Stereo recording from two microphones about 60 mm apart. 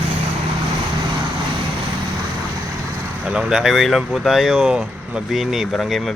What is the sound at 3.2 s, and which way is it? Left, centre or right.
Speech, centre.